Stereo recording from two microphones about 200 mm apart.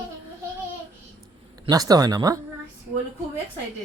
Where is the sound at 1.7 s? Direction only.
20° right (ahead or behind).